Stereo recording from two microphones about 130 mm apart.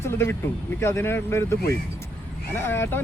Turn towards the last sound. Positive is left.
turn(degrees=15)  # may be behind; listen again after turning